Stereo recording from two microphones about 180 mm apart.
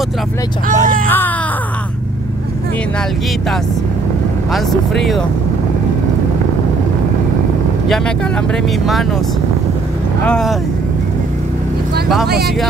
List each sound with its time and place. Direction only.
0.7 s speech: 45° right (ahead or behind)
1.0 s speech: 10° left (ahead or behind)
4.5 s speech: centre (ahead or behind)
10.2 s speech: 5° left (ahead or behind)